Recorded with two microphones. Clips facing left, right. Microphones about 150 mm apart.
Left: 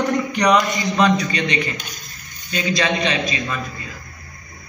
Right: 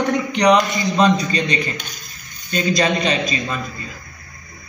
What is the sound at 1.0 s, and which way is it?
A man's voice, 25° right (ahead or behind).